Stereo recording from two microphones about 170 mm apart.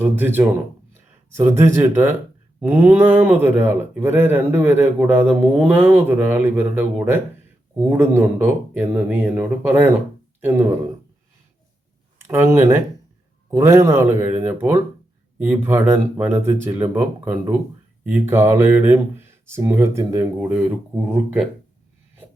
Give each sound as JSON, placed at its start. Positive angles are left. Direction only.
{"t": 0.0, "sound": "speech", "side_deg": -10}
{"t": 12.3, "sound": "speech", "side_deg": -15}